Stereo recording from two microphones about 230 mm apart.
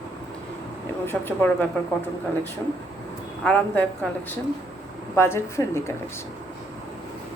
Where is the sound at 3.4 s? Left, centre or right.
Centre.